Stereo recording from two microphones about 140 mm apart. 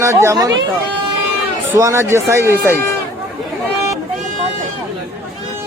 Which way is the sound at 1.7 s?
20° right (ahead or behind).